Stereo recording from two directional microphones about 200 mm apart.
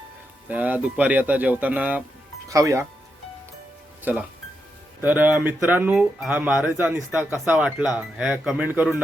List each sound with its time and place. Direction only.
0.4 s speech: 10° right (ahead or behind)
4.1 s speech: 10° right (ahead or behind)